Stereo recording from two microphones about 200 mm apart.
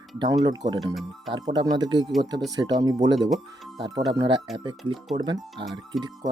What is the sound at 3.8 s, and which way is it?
Speech, 20° right (ahead or behind).